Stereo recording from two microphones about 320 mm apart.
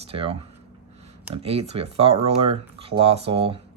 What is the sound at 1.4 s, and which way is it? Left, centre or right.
Speech, centre.